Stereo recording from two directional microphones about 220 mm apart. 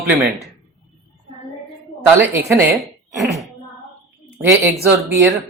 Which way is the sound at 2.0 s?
10° right (ahead or behind).